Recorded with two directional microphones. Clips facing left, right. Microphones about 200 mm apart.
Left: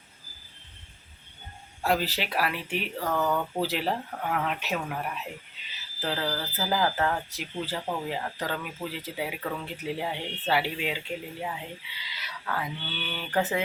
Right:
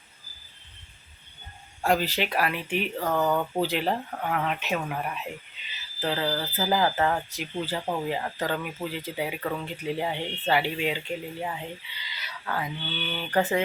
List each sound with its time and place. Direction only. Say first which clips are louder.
1.8 s speech: right 2 dB; 5° left (ahead or behind)
3.1 s speech: right 2 dB; 15° right (ahead or behind)
3.6 s speech: right 2 dB; 5° left (ahead or behind)